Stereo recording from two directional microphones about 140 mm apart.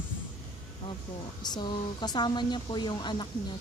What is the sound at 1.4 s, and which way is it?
A woman's voice, 30° left (ahead or behind).